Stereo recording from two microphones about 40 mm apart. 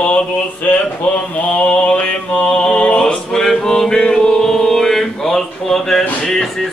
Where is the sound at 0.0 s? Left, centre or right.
Left.